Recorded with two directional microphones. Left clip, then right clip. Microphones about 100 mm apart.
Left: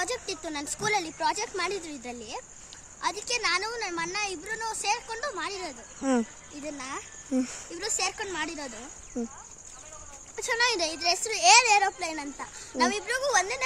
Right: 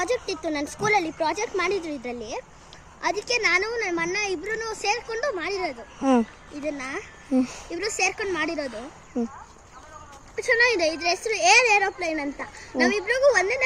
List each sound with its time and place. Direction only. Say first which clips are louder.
0.0 s a woman's voice: right 6 dB; 55° left (ahead or behind)
6.0 s speech: right 6 dB; 20° left (ahead or behind)
7.3 s speech: right 6 dB; 20° left (ahead or behind)
8.4 s speech: right 7 dB; 35° left (ahead or behind)
10.3 s speech: right 6 dB; 40° left (ahead or behind); by 13.6 s 60° left (ahead or behind)